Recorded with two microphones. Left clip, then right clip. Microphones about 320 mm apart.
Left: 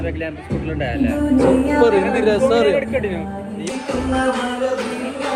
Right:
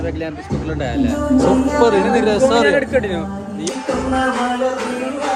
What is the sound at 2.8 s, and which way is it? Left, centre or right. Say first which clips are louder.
Speech: right 3 dB; right.